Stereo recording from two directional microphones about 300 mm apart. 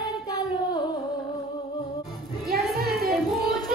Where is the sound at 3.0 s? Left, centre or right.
Right.